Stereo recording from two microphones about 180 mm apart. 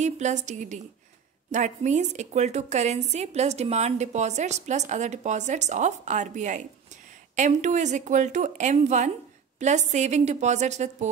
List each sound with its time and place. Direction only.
0.0 s a woman's voice: 40° right (ahead or behind)